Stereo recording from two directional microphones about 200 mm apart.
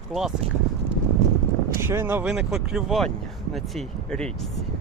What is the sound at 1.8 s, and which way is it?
Speech, 10° right (ahead or behind).